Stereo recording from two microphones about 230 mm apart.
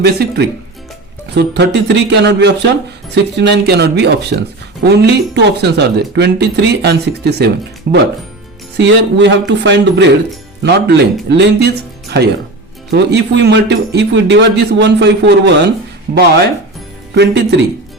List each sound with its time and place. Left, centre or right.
0.0 s speech: right
12.9 s speech: right